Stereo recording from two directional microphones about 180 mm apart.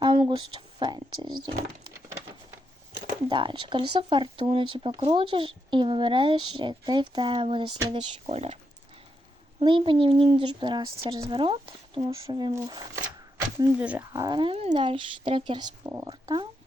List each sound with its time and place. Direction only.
0.3 s speech: 25° right (ahead or behind)
3.2 s speech: 25° right (ahead or behind)
9.6 s speech: 25° right (ahead or behind)
13.6 s speech: 10° right (ahead or behind)
14.0 s speech: 20° right (ahead or behind)